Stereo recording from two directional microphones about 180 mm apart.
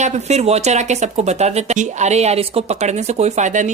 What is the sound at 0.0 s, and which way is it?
Speech, 40° right (ahead or behind).